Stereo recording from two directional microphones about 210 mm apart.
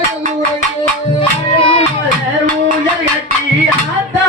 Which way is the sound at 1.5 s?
25° left (ahead or behind).